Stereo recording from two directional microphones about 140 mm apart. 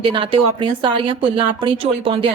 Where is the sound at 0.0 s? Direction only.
40° right (ahead or behind).